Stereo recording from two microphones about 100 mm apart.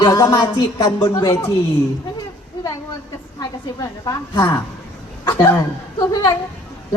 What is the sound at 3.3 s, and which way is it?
A woman's voice, 35° left (ahead or behind).